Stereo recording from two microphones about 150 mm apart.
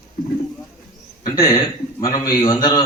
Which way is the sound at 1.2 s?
25° left (ahead or behind).